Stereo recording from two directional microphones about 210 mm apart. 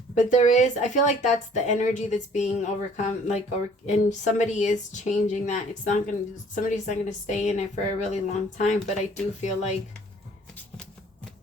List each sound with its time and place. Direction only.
0.1 s speech: 35° left (ahead or behind)